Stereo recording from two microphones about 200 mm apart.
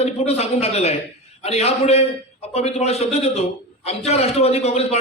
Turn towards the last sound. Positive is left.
turn(degrees=30)  # may be behind; listen again after turning